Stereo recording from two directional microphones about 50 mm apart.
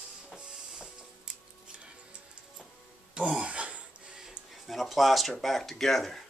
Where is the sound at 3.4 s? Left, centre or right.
Right.